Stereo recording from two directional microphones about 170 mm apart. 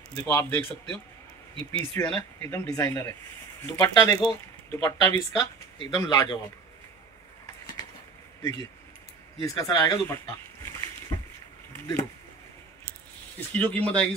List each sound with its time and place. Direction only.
0.1 s speech: 15° left (ahead or behind)
1.5 s speech: 30° right (ahead or behind)
1.8 s speech: 15° left (ahead or behind)
8.4 s speech: 15° left (ahead or behind)
13.5 s speech: 10° left (ahead or behind)